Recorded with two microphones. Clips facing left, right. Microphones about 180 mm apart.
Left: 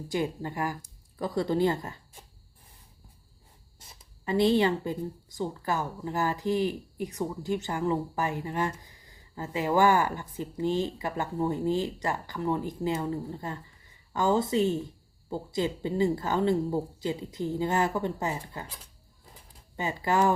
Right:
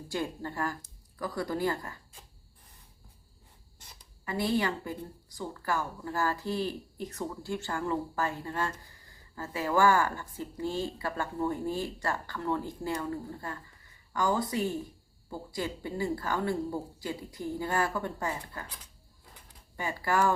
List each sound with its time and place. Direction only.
0.1 s speech: 15° left (ahead or behind)
1.2 s a woman's voice: 25° left (ahead or behind)
4.3 s a woman's voice: 25° left (ahead or behind)